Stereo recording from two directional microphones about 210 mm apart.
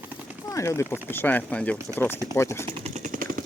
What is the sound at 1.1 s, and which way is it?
Speech, 10° left (ahead or behind).